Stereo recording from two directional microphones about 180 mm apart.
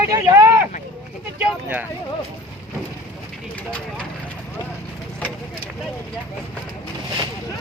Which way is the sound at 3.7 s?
5° left (ahead or behind).